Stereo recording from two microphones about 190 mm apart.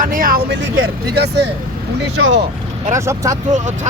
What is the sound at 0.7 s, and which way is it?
Speech, 60° right (ahead or behind).